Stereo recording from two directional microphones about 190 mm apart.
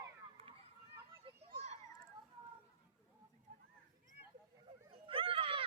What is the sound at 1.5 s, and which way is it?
Children playing, 35° right (ahead or behind).